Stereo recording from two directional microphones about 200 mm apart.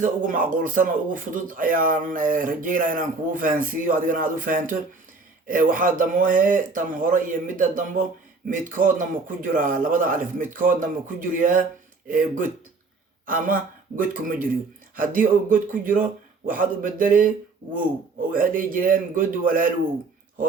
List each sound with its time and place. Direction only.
0.0 s a man's voice: 40° right (ahead or behind)